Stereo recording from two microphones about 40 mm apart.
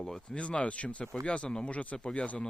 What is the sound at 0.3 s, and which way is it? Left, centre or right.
Speech, left.